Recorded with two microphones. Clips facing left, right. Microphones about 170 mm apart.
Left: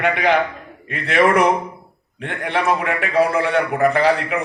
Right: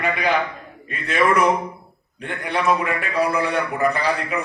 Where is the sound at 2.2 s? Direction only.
90° left.